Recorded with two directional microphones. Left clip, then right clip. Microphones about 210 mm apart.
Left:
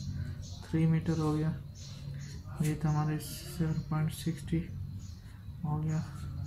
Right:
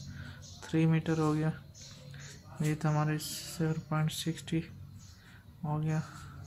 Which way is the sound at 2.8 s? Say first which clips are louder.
Right 2 dB; 45° right (ahead or behind).